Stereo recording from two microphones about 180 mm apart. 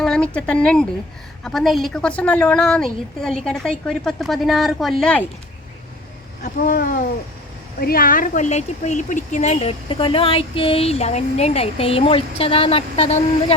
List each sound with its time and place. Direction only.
0.0 s a woman's voice: 5° left (ahead or behind)
6.4 s speech: 50° left (ahead or behind); by 13.2 s 35° left (ahead or behind)